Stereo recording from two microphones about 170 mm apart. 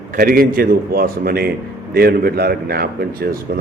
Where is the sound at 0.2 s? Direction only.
60° right (ahead or behind).